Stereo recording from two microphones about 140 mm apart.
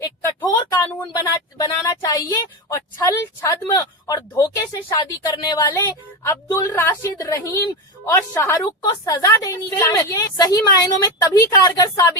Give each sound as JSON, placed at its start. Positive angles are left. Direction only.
{"t": 0.0, "sound": "a woman's voice", "side_deg": 20}